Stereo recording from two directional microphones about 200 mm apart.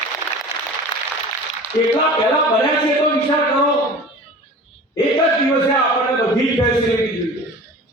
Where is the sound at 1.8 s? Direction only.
15° left (ahead or behind).